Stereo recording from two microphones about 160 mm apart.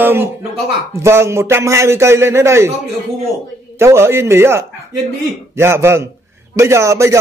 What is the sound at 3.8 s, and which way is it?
Speech, 15° right (ahead or behind).